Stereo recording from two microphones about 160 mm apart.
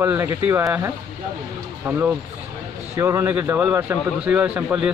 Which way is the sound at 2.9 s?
20° right (ahead or behind).